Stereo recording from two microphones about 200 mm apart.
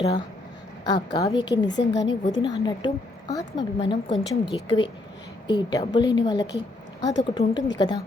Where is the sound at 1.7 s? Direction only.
60° left (ahead or behind).